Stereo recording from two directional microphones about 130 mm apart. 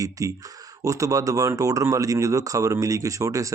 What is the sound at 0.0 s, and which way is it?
Speech, 25° right (ahead or behind).